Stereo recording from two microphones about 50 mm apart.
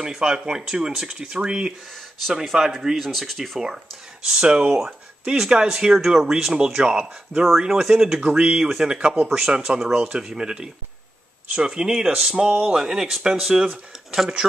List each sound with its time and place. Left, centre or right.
0.0 s speech: centre
2.5 s speech: centre
4.3 s speech: centre
5.2 s speech: centre